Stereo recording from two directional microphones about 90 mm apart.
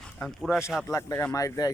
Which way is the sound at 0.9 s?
35° left (ahead or behind).